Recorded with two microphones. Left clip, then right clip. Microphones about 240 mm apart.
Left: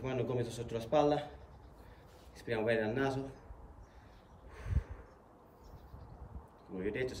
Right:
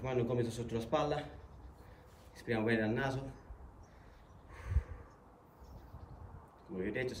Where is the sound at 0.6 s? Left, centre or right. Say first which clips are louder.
Left 7 dB; right.